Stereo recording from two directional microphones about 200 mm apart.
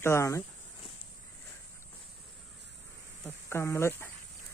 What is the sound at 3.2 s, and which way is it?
Speech, 10° left (ahead or behind).